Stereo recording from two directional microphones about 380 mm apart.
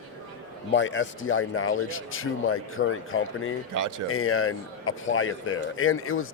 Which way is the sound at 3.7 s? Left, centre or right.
Right.